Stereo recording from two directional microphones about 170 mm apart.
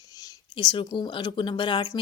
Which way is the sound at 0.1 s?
20° left (ahead or behind).